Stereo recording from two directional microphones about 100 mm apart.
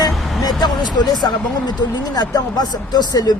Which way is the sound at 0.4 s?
45° left (ahead or behind).